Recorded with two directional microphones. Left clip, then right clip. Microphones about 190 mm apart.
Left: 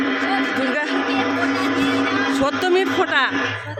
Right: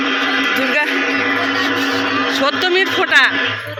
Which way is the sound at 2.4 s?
20° left (ahead or behind).